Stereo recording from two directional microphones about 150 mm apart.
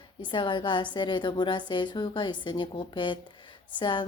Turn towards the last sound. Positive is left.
turn(degrees=30)  # may be behind; listen again after turning